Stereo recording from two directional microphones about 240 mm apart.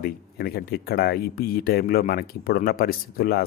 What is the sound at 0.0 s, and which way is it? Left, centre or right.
Speech, left.